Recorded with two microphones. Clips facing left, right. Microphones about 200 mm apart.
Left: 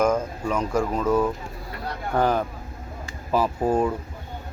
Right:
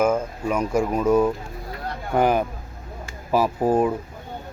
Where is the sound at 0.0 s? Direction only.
10° right (ahead or behind).